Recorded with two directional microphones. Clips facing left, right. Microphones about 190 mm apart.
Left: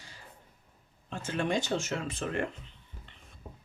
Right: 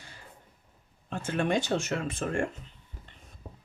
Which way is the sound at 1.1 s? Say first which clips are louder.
Right 3 dB; 55° right (ahead or behind).